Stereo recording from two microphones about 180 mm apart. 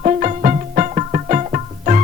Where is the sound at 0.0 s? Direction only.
40° right (ahead or behind).